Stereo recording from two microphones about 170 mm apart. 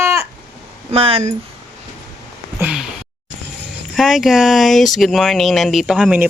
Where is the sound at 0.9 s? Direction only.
35° right (ahead or behind).